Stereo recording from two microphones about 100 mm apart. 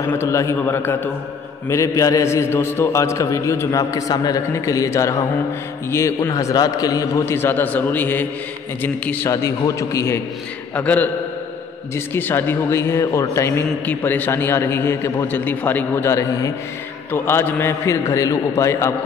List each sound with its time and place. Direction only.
0.0 s a man's voice: 25° left (ahead or behind)
1.7 s a man's voice: 30° left (ahead or behind)
9.3 s a man's voice: 30° left (ahead or behind)
10.7 s a man's voice: 15° left (ahead or behind); by 16.5 s 35° left (ahead or behind)
17.1 s a man's voice: 20° left (ahead or behind)